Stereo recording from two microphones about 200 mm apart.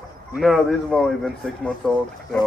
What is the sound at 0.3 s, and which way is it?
A man's voice, centre (ahead or behind).